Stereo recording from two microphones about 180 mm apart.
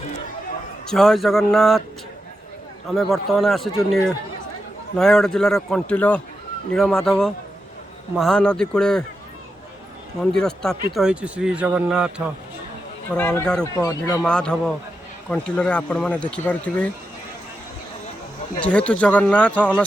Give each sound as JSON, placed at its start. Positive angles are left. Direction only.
{"t": 0.9, "sound": "speech", "side_deg": 0}
{"t": 2.9, "sound": "speech", "side_deg": 0}
{"t": 4.9, "sound": "speech", "side_deg": 5}
{"t": 10.3, "sound": "speech", "side_deg": 5}
{"t": 13.1, "sound": "speech", "side_deg": 5}
{"t": 13.7, "sound": "speech", "side_deg": 20}
{"t": 14.2, "sound": "speech", "side_deg": 5}
{"t": 18.6, "sound": "speech", "side_deg": 5}